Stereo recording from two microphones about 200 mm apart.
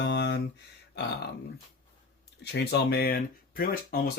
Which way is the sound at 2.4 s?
55° left (ahead or behind).